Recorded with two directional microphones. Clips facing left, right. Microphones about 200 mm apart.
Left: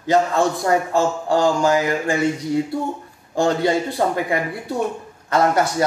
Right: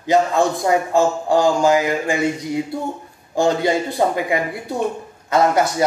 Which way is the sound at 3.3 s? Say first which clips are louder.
Right 1 dB; 15° right (ahead or behind).